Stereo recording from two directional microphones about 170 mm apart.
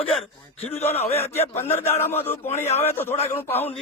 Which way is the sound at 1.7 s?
40° left (ahead or behind).